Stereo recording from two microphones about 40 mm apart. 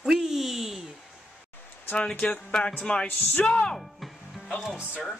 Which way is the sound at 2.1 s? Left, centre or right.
Left.